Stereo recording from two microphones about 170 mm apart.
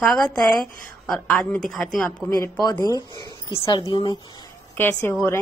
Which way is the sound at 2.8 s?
25° left (ahead or behind).